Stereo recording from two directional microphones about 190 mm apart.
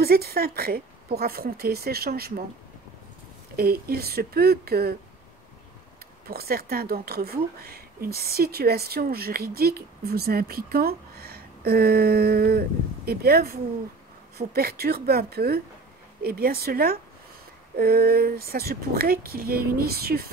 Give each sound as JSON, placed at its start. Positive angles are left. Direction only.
{"t": 0.0, "sound": "speech", "side_deg": -55}
{"t": 3.5, "sound": "speech", "side_deg": -50}
{"t": 6.2, "sound": "speech", "side_deg": -55}